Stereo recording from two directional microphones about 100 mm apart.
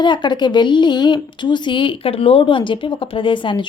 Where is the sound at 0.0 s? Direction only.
50° left (ahead or behind).